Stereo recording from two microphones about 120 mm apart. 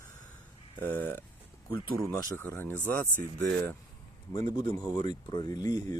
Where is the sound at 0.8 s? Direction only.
15° left (ahead or behind).